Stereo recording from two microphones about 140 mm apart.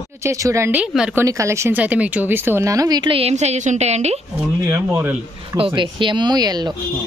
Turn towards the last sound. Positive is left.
turn(degrees=-30)  # may be behind; listen again after turning